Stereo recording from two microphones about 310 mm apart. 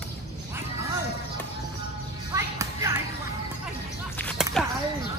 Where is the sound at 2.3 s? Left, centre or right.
Centre.